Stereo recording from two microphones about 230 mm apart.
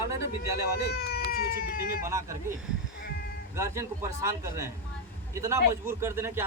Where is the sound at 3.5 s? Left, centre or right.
Centre.